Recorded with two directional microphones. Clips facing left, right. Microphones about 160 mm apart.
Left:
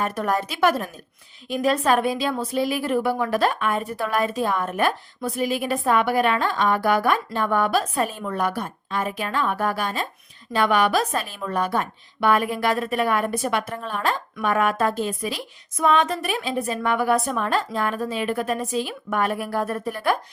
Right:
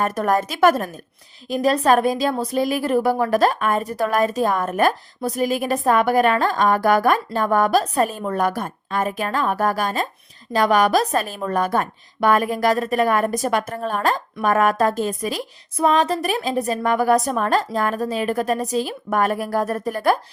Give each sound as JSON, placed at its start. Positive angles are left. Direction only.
{"t": 0.0, "sound": "a woman's voice", "side_deg": -45}